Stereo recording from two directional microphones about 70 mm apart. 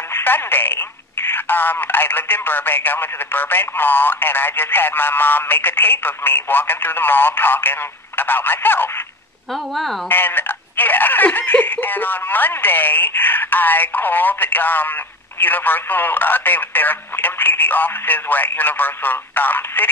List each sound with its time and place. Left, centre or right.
0.1 s speech: left
9.5 s a woman's voice: centre
10.0 s speech: left